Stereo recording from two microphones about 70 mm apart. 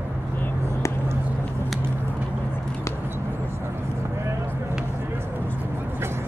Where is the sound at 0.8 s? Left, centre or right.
Left.